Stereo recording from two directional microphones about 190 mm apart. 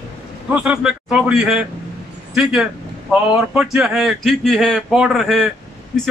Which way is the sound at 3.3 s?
5° right (ahead or behind).